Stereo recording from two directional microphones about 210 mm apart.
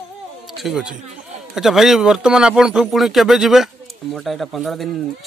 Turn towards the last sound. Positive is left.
turn(degrees=0)  # may be behind; listen again after turning